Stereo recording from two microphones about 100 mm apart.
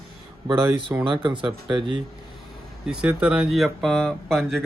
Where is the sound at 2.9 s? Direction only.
10° right (ahead or behind).